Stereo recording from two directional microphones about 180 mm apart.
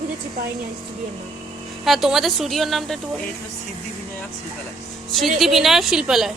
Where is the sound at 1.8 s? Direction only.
Centre (ahead or behind).